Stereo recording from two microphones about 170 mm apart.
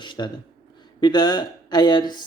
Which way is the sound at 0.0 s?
25° left (ahead or behind).